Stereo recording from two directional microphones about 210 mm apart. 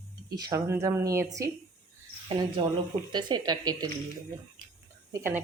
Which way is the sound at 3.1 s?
20° right (ahead or behind).